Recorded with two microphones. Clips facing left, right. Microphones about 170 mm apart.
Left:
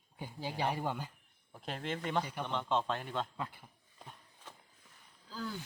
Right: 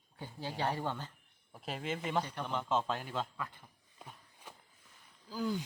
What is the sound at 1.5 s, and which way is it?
Speech, 5° right (ahead or behind).